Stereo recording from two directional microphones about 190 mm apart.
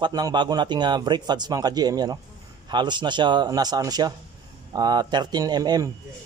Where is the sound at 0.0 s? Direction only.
20° right (ahead or behind).